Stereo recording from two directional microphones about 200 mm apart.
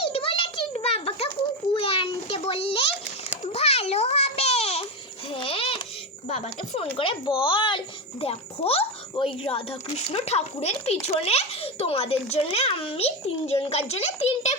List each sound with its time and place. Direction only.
0.0 s a sound: 30° left (ahead or behind)
5.3 s babbling: 25° left (ahead or behind)
6.2 s a child's voice: 30° left (ahead or behind)